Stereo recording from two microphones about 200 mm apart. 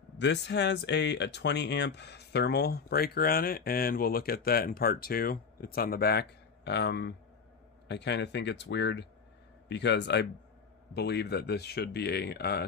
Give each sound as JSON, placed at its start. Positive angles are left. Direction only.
{"t": 0.2, "sound": "speech", "side_deg": 60}